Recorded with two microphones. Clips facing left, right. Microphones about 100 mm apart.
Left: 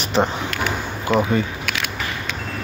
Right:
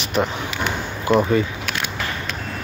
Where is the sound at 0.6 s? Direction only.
Centre (ahead or behind).